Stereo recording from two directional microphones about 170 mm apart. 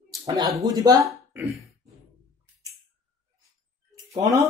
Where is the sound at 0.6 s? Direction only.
20° right (ahead or behind).